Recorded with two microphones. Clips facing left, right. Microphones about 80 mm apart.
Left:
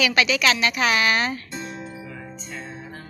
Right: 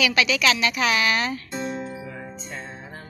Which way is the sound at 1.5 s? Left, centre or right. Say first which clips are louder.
Right 4 dB; right.